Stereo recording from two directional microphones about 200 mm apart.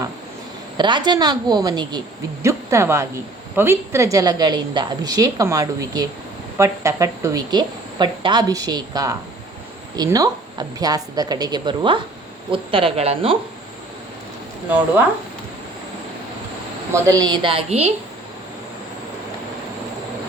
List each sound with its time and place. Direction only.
0.8 s a woman's voice: 25° right (ahead or behind)
16.9 s a woman's voice: 20° right (ahead or behind)